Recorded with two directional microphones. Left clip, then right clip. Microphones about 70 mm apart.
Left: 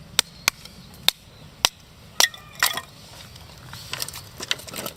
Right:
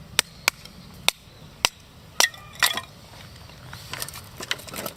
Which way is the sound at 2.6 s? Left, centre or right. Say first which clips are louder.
Right 1 dB; left.